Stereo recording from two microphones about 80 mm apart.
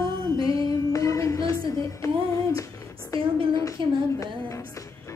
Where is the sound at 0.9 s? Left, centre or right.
Left.